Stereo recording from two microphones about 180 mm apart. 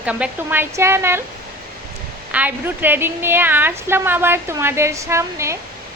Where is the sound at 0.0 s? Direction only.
5° right (ahead or behind).